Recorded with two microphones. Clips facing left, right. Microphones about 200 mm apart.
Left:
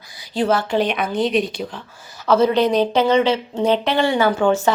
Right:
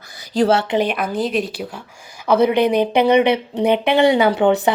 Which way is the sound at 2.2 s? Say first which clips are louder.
Right 1 dB; 15° right (ahead or behind).